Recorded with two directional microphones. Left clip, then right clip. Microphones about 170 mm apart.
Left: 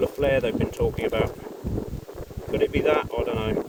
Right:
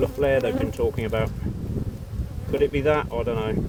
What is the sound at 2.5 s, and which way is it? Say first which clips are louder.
Speech: even; 50° right (ahead or behind).